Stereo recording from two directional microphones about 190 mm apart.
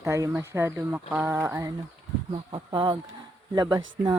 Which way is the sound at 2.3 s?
25° right (ahead or behind).